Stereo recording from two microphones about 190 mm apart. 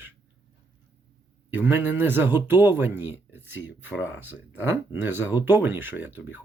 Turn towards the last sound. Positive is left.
turn(degrees=-10)  # may be behind; listen again after turning